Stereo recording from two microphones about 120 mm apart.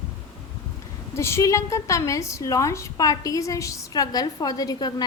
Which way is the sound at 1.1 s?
25° left (ahead or behind).